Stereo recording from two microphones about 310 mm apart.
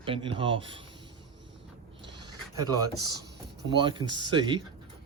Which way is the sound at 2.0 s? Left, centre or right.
Centre.